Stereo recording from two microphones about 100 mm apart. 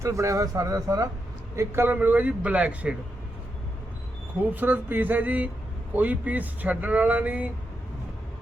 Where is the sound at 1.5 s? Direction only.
25° right (ahead or behind).